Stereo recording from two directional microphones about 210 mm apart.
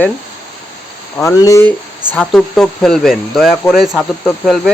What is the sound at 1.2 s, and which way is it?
Speech, 15° left (ahead or behind).